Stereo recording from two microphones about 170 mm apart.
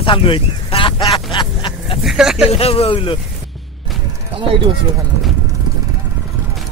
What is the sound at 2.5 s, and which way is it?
Speech, 35° left (ahead or behind).